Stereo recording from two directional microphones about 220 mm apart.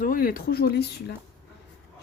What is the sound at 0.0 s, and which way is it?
A woman's voice, 40° left (ahead or behind).